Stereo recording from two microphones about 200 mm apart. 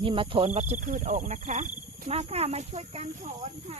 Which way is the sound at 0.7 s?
40° right (ahead or behind).